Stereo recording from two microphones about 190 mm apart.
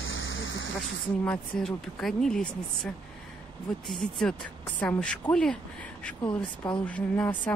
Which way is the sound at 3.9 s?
5° left (ahead or behind).